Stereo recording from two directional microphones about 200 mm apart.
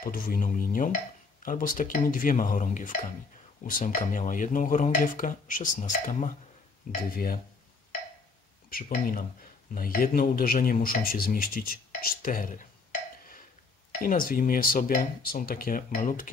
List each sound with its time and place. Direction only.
0.0 s speech: 45° left (ahead or behind)
8.6 s speech: 45° left (ahead or behind)
14.0 s speech: 45° left (ahead or behind)